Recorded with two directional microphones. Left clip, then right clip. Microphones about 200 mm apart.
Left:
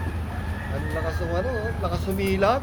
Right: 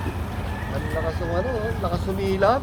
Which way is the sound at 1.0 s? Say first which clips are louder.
Right 1 dB; 20° left (ahead or behind).